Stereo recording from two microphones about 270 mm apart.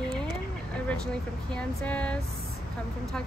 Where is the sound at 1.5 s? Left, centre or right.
Centre.